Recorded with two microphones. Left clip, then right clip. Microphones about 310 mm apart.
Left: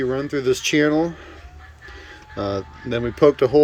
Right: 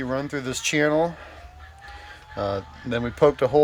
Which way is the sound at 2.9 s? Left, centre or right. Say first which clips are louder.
Left 3 dB; centre.